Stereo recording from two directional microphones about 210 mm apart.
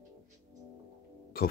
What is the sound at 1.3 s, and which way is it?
Music, 45° left (ahead or behind).